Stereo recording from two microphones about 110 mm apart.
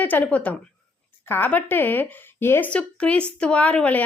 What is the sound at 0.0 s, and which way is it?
A woman's voice, 15° left (ahead or behind).